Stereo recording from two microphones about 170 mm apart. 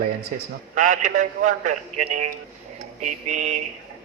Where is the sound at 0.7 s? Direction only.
45° right (ahead or behind).